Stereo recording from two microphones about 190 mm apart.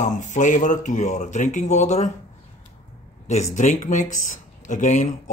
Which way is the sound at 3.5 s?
40° left (ahead or behind).